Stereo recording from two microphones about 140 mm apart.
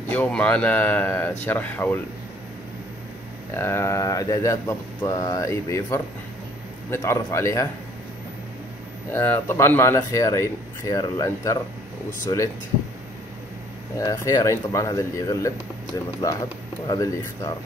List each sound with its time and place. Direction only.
0.1 s speech: 10° left (ahead or behind)
3.5 s speech: 20° left (ahead or behind)
9.1 s speech: 15° left (ahead or behind)
13.9 s speech: 25° left (ahead or behind)